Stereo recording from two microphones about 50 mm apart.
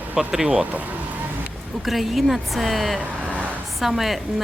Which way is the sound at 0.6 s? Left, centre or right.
Right.